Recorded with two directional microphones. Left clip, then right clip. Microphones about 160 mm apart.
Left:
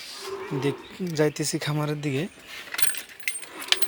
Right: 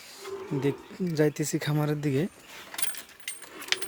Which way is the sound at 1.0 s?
30° right (ahead or behind).